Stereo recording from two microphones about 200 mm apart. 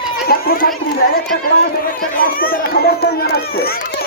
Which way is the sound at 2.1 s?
45° left (ahead or behind).